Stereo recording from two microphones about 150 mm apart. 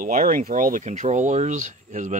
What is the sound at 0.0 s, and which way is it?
Speech, 65° right (ahead or behind).